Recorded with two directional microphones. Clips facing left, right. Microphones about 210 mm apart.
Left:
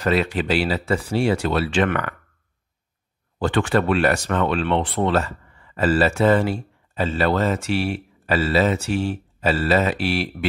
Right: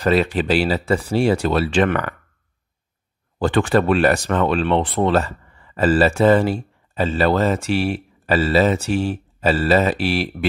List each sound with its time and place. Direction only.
0.0 s speech: 35° right (ahead or behind)
3.3 s speech: 40° right (ahead or behind)